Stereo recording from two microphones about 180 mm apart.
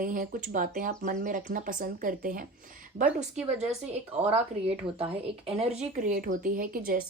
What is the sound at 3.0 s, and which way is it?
Speech, 5° right (ahead or behind).